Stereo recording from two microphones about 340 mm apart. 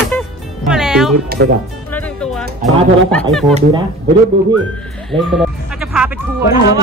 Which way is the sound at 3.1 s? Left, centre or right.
Centre.